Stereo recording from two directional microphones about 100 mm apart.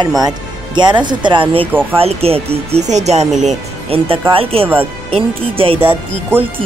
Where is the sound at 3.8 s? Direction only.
70° right (ahead or behind).